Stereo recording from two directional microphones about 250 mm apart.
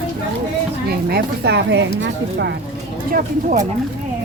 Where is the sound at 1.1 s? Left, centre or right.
Right.